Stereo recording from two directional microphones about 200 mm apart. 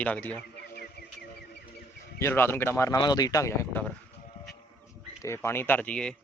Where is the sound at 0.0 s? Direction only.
5° left (ahead or behind).